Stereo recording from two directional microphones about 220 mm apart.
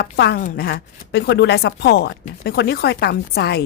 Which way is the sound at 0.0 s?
45° left (ahead or behind).